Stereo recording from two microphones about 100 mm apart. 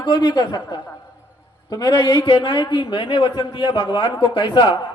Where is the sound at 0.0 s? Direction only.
50° left (ahead or behind).